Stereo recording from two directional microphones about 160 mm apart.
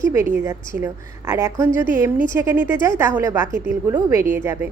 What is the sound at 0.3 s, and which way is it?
A woman's voice, 15° right (ahead or behind).